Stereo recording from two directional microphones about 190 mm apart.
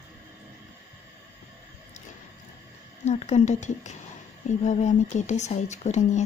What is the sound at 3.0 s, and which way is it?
Speech, 35° left (ahead or behind).